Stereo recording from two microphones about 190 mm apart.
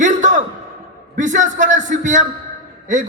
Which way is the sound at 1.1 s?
40° right (ahead or behind).